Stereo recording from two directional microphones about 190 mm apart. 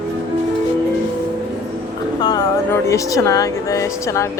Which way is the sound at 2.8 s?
15° left (ahead or behind).